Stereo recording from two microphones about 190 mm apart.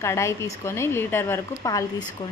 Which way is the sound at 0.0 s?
15° left (ahead or behind).